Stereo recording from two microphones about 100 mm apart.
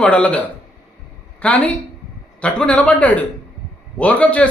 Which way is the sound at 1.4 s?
15° left (ahead or behind).